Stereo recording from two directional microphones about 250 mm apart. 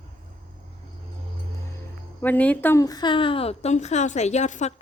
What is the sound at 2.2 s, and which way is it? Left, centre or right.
A woman's voice, centre.